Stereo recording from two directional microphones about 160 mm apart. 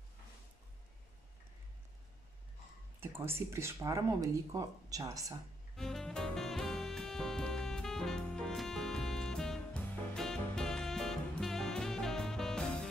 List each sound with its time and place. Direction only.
3.0 s speech: 15° right (ahead or behind)
5.8 s music: 5° left (ahead or behind)